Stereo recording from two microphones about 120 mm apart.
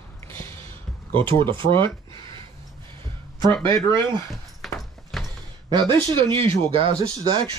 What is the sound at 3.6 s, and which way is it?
Speech, 40° right (ahead or behind).